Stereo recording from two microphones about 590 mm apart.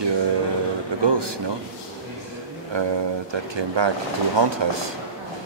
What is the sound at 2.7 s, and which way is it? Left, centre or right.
Speech, right.